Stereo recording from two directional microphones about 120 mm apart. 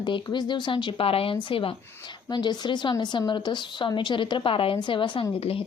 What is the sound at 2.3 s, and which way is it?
Speech, 35° left (ahead or behind).